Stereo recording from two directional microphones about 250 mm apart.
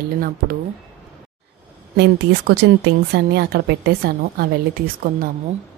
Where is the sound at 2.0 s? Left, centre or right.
Right.